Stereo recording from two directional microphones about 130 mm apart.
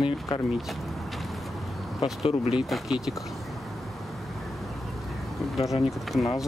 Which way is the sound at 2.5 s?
5° right (ahead or behind).